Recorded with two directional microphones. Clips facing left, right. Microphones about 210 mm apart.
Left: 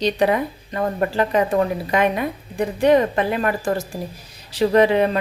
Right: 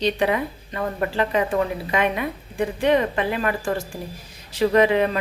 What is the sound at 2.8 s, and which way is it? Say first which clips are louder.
A woman's voice: left 4 dB; 40° left (ahead or behind).